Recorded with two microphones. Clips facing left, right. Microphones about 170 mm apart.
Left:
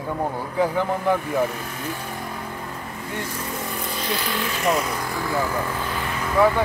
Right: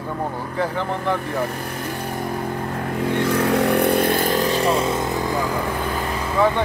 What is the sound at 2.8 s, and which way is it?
Vehicle, 70° right (ahead or behind).